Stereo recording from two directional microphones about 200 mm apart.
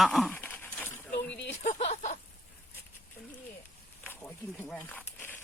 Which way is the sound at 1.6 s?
35° left (ahead or behind).